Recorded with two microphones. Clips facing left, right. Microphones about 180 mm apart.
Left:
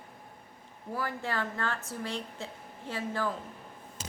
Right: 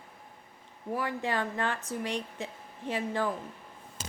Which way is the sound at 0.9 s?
20° right (ahead or behind).